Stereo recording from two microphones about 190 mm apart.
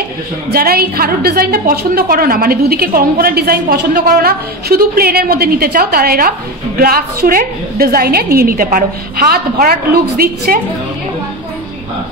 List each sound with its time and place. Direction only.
0.5 s a woman's voice: 55° right (ahead or behind)